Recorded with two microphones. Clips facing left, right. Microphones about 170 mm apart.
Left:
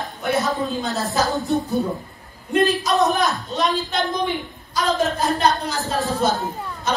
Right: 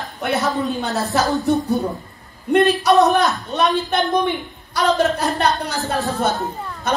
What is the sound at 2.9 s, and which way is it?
Speech, 65° right (ahead or behind).